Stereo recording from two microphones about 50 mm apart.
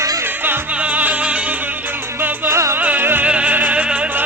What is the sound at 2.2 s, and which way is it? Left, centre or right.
Music, right.